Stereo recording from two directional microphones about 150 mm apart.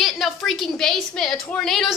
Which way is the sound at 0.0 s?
Centre (ahead or behind).